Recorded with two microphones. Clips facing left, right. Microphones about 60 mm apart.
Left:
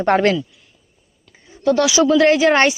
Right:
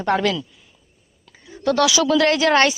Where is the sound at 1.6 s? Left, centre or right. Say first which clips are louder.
Left 3 dB; centre.